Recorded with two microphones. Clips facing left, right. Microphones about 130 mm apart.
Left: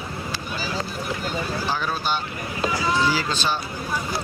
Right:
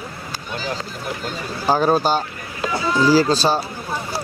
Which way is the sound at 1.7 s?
40° right (ahead or behind).